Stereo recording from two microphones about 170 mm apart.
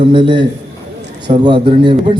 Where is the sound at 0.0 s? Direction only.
30° right (ahead or behind).